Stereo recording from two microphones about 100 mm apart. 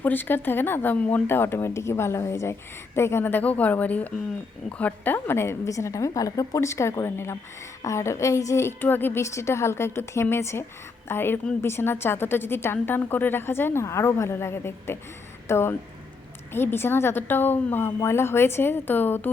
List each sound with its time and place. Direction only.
0.0 s speech: 20° left (ahead or behind)